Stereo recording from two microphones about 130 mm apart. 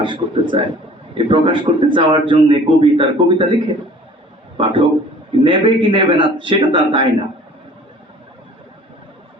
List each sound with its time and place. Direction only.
0.0 s a man's voice: 40° right (ahead or behind)
4.5 s a man's voice: 40° right (ahead or behind)